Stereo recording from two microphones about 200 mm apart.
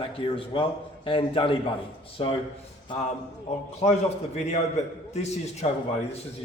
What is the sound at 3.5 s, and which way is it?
A man's voice, 30° left (ahead or behind).